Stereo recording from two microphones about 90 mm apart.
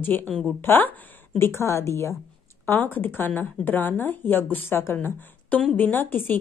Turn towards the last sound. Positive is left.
turn(degrees=20)  # may be behind; listen again after turning